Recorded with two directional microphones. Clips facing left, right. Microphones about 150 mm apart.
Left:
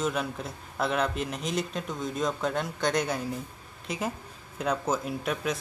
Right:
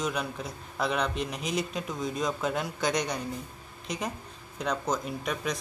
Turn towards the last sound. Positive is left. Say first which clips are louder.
# left 2 dB
turn(degrees=5)  # may be behind; listen again after turning